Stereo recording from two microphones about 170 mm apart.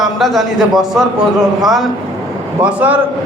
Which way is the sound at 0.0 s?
Centre (ahead or behind).